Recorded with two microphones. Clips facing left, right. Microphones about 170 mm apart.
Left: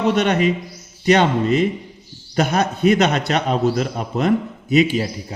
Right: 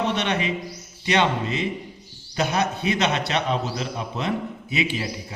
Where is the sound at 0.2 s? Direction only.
45° left (ahead or behind).